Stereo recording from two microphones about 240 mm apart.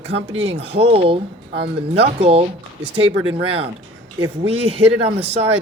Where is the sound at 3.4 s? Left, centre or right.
Right.